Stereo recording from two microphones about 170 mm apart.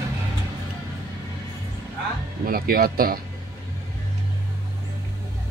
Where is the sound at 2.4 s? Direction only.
60° right (ahead or behind).